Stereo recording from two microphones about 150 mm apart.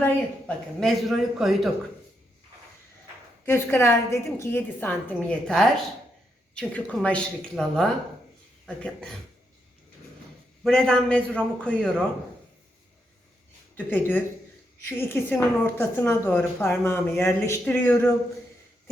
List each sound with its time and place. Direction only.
0.0 s a man's voice: 5° left (ahead or behind)
3.4 s a woman's voice: 15° left (ahead or behind)
10.6 s a man's voice: 5° left (ahead or behind)
13.7 s a woman's voice: 10° left (ahead or behind)